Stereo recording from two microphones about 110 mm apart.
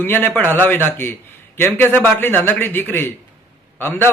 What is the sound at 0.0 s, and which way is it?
A man's voice, 20° left (ahead or behind).